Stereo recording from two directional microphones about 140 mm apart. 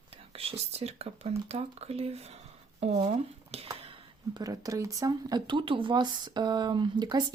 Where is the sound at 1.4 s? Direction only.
45° right (ahead or behind).